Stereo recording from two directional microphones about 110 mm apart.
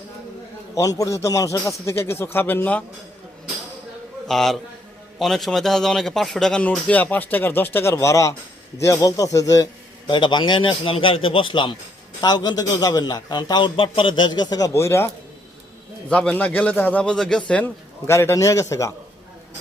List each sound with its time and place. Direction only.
0.8 s a man's voice: 30° left (ahead or behind); by 2.8 s 15° left (ahead or behind)
4.3 s a man's voice: 5° left (ahead or behind); by 9.6 s 30° left (ahead or behind)
10.1 s a man's voice: 45° left (ahead or behind)
14.7 s a man's voice: 25° left (ahead or behind)
16.0 s speech: 10° left (ahead or behind)
18.0 s a man's voice: 25° left (ahead or behind)